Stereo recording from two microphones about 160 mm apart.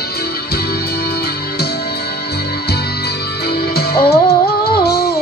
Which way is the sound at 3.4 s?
80° left.